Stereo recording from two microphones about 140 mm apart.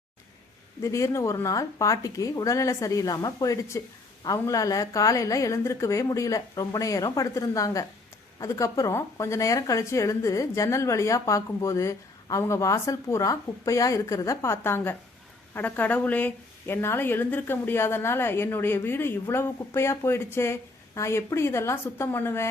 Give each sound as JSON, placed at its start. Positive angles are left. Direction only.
{"t": 0.8, "sound": "a woman's voice", "side_deg": 20}